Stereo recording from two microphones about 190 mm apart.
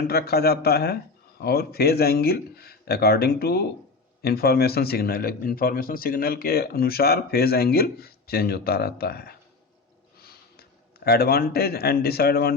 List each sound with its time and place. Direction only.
0.1 s speech: 55° left (ahead or behind)